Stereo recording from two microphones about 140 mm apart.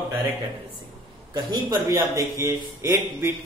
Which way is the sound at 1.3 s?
30° right (ahead or behind).